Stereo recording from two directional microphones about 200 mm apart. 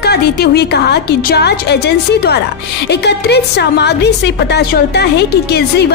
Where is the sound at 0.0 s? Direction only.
55° left (ahead or behind).